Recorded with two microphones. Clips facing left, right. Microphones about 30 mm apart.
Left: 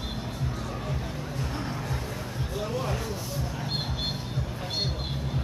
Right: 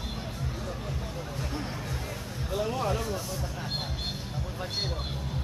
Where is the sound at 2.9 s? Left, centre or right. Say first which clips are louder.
Right 2 dB; centre.